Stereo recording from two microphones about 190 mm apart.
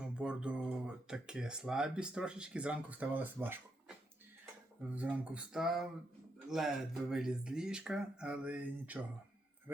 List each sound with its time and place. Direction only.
0.0 s speech: 5° right (ahead or behind)
4.9 s speech: 10° right (ahead or behind)